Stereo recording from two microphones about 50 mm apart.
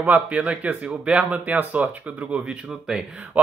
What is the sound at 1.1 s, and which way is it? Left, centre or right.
Speech, right.